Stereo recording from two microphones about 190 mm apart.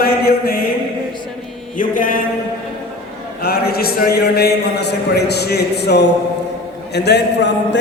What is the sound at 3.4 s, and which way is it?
A man's voice, 55° left (ahead or behind).